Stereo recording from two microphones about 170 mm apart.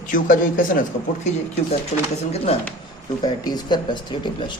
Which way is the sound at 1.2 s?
40° left (ahead or behind).